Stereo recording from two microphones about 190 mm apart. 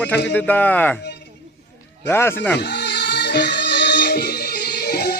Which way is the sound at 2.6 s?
60° left (ahead or behind).